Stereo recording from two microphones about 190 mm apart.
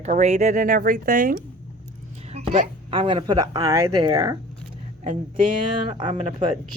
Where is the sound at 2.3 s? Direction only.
30° right (ahead or behind).